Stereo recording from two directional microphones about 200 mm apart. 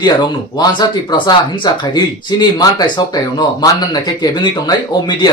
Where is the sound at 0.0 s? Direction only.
20° left (ahead or behind).